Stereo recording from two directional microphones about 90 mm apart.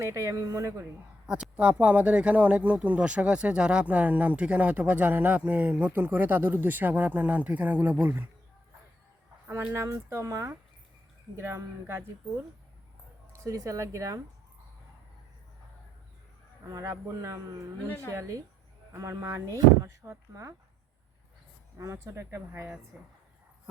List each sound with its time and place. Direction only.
0.0 s speech: 35° right (ahead or behind)
1.3 s speech: 10° right (ahead or behind)
9.7 s speech: 30° right (ahead or behind)
13.3 s speech: 35° right (ahead or behind)
16.6 s speech: 35° right (ahead or behind)
21.8 s speech: 35° right (ahead or behind)